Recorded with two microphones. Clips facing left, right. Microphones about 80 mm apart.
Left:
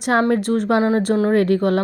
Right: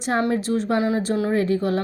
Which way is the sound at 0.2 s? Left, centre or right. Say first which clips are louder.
Left 4 dB; left.